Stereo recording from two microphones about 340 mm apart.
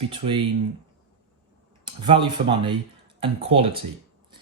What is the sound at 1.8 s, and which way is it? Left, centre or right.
Speech, centre.